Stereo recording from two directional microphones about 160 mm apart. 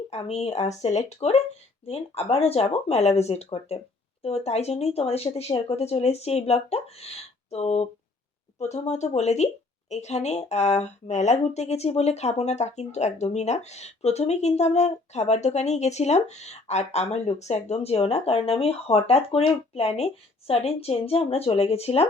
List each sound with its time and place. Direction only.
0.1 s speech: 40° left (ahead or behind)